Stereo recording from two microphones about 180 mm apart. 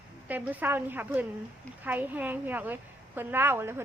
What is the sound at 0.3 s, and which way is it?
A woman's voice, 10° right (ahead or behind).